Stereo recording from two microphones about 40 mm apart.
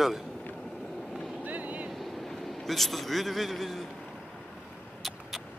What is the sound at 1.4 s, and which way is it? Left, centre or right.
Vehicle, right.